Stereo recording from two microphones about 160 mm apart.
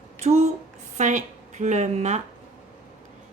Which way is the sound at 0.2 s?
45° right (ahead or behind).